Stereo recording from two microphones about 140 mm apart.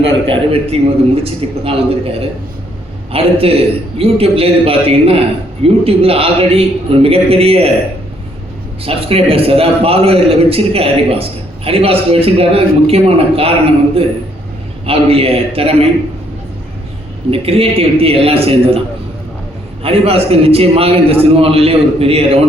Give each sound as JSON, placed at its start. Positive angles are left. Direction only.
{"t": 0.3, "sound": "a man's voice", "side_deg": -45}
{"t": 3.1, "sound": "a man's voice", "side_deg": -45}
{"t": 8.8, "sound": "a man's voice", "side_deg": -45}
{"t": 17.3, "sound": "a man's voice", "side_deg": -45}
{"t": 19.8, "sound": "a man's voice", "side_deg": -45}